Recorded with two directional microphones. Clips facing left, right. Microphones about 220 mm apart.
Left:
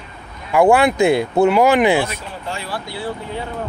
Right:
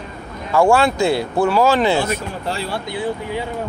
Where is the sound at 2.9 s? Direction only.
15° right (ahead or behind).